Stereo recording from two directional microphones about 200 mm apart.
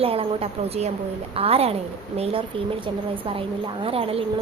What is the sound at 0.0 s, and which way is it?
A woman's voice, 30° right (ahead or behind).